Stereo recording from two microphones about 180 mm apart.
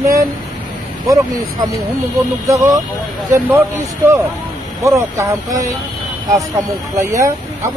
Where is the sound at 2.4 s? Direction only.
20° right (ahead or behind).